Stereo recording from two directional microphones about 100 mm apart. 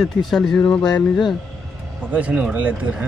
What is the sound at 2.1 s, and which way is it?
Speech, 15° right (ahead or behind).